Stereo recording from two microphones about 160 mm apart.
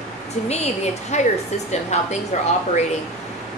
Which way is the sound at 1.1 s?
45° left (ahead or behind).